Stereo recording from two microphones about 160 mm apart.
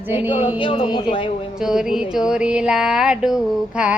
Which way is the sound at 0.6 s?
30° left (ahead or behind).